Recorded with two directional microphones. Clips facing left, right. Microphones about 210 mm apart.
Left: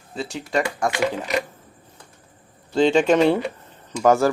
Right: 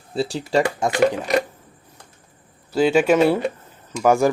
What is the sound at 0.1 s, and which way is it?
Speech, 35° right (ahead or behind).